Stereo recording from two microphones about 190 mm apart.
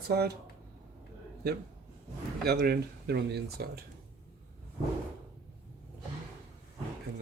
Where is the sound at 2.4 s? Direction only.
55° right (ahead or behind).